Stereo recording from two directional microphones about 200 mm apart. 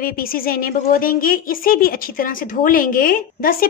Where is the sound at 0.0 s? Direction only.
45° left (ahead or behind).